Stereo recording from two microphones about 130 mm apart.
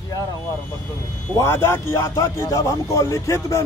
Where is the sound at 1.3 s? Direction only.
20° left (ahead or behind).